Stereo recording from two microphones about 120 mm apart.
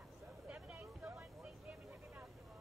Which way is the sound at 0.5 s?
10° right (ahead or behind).